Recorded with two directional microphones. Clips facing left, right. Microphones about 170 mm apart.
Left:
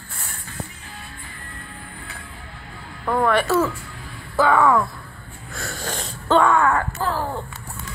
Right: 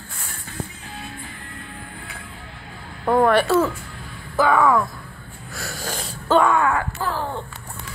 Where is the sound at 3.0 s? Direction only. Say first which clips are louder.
Right 3 dB; 30° right (ahead or behind).